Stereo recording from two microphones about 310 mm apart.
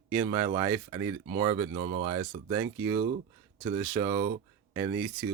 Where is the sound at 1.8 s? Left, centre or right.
Right.